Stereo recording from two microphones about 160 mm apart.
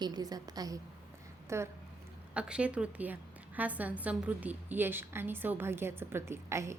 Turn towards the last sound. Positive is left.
turn(degrees=-15)  # may be behind; listen again after turning